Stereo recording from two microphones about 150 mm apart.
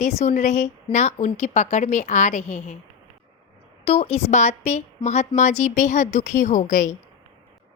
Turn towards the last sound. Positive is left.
turn(degrees=55)  # may be behind; listen again after turning